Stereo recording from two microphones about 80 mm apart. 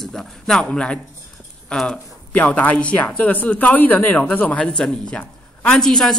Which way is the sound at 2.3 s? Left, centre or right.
Left.